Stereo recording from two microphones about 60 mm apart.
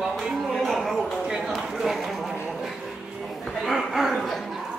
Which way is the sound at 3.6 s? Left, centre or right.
Centre.